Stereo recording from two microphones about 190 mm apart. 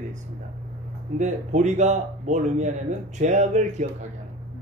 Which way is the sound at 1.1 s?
40° right (ahead or behind).